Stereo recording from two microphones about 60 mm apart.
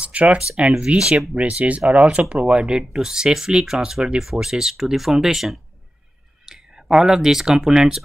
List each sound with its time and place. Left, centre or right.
0.0 s speech: right
1.3 s speech: right